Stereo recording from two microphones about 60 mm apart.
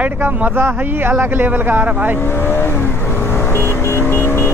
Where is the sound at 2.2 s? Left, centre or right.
Left.